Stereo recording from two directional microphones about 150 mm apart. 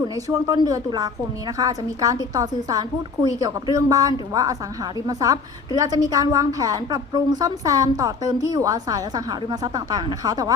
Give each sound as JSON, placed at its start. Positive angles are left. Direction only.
{"t": 0.3, "sound": "a woman's voice", "side_deg": -25}